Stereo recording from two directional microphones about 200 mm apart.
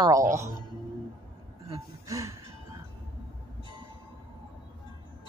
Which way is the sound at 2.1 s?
15° right (ahead or behind).